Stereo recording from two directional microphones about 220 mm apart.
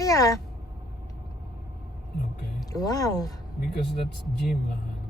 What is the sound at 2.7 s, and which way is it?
Speech, 15° left (ahead or behind).